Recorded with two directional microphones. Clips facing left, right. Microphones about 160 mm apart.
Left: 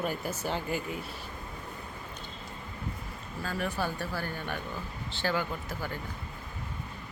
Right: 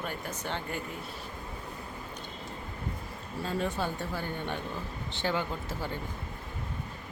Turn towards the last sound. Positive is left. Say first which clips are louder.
# right 1 dB
turn(degrees=-25)  # may be behind; listen again after turning